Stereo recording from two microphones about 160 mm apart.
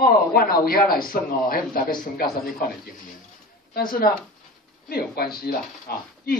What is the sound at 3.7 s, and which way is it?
Speech, 65° left (ahead or behind).